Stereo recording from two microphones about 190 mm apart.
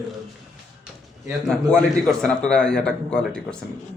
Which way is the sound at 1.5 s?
5° left (ahead or behind).